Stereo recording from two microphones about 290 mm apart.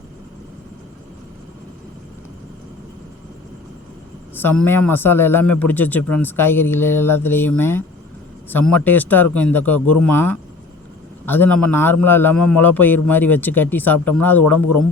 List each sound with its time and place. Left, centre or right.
4.6 s speech: centre
6.0 s a man's voice: left
6.2 s a man's voice: centre
12.3 s a man's voice: left
12.6 s speech: centre
14.0 s a man's voice: left